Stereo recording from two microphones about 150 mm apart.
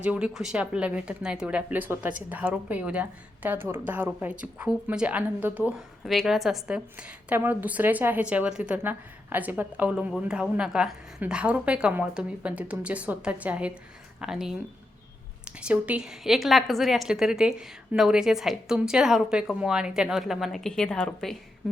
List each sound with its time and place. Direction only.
0.0 s speech: 5° right (ahead or behind)
6.1 s a woman's voice: centre (ahead or behind)